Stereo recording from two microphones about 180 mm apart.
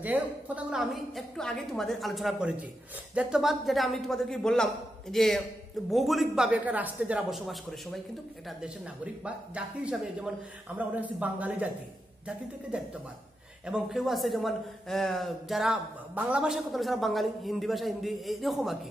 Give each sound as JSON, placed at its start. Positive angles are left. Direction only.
{"t": 0.0, "sound": "a man's voice", "side_deg": -10}
{"t": 13.7, "sound": "a man's voice", "side_deg": -5}